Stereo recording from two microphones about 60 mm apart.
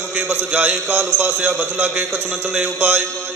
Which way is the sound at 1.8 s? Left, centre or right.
Right.